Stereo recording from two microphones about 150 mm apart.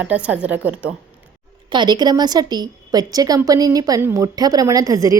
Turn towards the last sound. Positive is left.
turn(degrees=-25)  # may be behind; listen again after turning